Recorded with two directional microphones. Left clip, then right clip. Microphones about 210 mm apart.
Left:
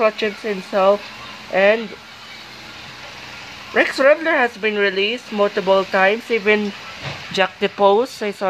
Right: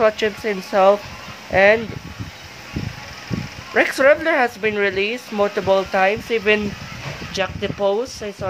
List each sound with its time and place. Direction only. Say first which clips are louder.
0.0 s speech: right 1 dB; 5° right (ahead or behind)
3.7 s speech: even; centre (ahead or behind)
7.3 s speech: left 5 dB; 15° left (ahead or behind)